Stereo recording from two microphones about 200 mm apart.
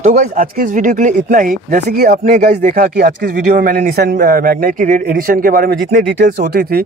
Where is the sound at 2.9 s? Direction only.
50° right (ahead or behind).